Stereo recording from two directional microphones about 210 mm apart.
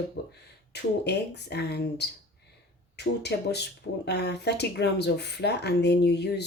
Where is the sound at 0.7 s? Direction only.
55° left (ahead or behind).